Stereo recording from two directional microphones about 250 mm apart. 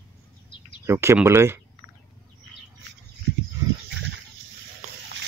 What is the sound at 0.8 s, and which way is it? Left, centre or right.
Speech, centre.